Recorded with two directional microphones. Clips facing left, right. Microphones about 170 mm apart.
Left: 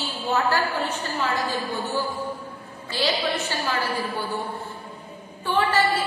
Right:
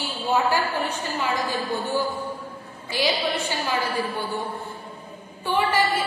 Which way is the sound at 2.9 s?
15° right (ahead or behind).